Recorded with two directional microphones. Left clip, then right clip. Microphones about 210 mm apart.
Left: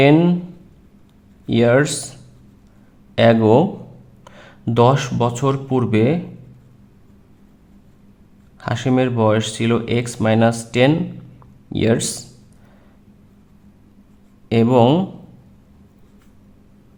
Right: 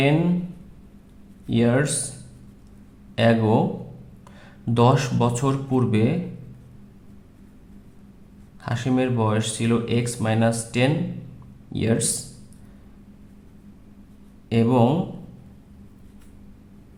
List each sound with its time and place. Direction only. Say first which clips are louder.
0.0 s speech: left 8 dB; 35° left (ahead or behind)
1.5 s speech: left 7 dB; 35° left (ahead or behind)
3.2 s speech: left 7 dB; 30° left (ahead or behind)
8.6 s speech: left 5 dB; 30° left (ahead or behind)
14.5 s speech: left 6 dB; 30° left (ahead or behind)